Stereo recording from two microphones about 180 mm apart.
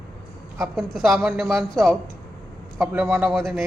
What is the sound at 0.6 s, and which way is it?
Speech, centre (ahead or behind).